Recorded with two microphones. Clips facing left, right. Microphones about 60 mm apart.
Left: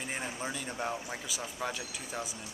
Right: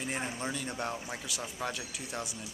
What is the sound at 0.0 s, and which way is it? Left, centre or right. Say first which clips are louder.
Speech: right 1 dB; centre.